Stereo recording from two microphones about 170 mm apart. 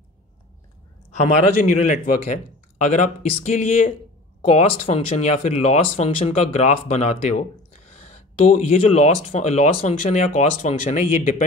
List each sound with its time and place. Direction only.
1.2 s speech: 45° left (ahead or behind)
8.5 s speech: 40° left (ahead or behind)